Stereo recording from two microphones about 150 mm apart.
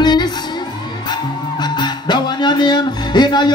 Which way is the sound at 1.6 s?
30° left (ahead or behind).